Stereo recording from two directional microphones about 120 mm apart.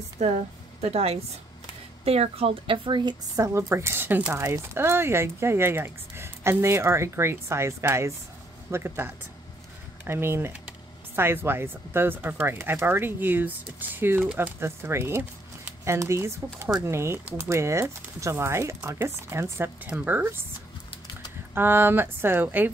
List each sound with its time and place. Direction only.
0.2 s a woman's voice: 80° right
0.7 s a woman's voice: 60° right (ahead or behind); by 20.3 s 15° right (ahead or behind)
21.5 s speech: 20° right (ahead or behind)